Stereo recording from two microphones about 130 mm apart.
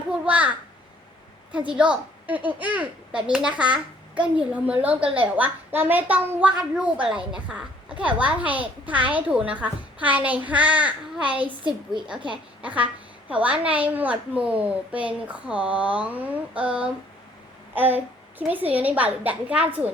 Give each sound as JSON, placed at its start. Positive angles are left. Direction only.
{"t": 0.1, "sound": "a sound", "side_deg": -10}
{"t": 1.7, "sound": "a child's voice", "side_deg": -10}
{"t": 12.6, "sound": "a woman's voice", "side_deg": -10}